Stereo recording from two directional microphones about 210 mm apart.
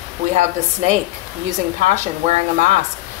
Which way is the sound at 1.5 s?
35° right (ahead or behind).